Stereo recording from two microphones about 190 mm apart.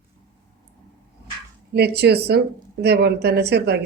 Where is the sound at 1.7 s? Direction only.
60° right (ahead or behind).